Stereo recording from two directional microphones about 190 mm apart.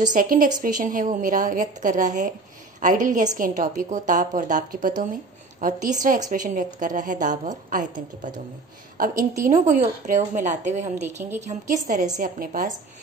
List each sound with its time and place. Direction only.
0.0 s a woman's voice: 45° right (ahead or behind)
9.4 s a woman's voice: 40° right (ahead or behind)